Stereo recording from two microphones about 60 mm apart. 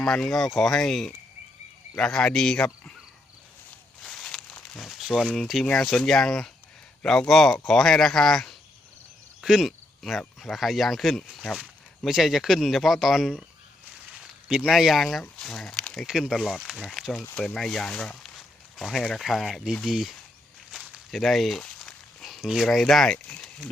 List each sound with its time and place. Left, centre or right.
0.0 s speech: centre
4.0 s crumpling: centre
4.8 s speech: centre
9.4 s speech: centre
14.4 s speech: centre
14.7 s speech: centre
15.7 s a sound: centre
16.0 s speech: centre
17.9 s speech: centre
18.8 s speech: centre
20.7 s a sound: centre
22.2 s speech: centre